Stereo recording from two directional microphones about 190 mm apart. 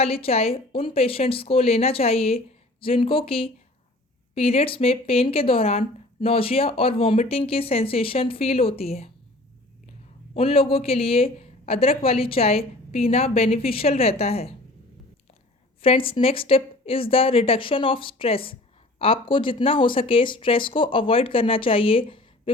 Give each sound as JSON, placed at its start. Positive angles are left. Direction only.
{"t": 0.0, "sound": "speech", "side_deg": 30}
{"t": 10.3, "sound": "speech", "side_deg": 30}
{"t": 15.8, "sound": "speech", "side_deg": 30}